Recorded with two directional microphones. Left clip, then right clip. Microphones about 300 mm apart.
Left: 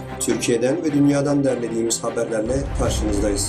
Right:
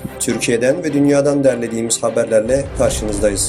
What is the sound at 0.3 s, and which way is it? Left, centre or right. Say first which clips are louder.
Speech: right 5 dB; right.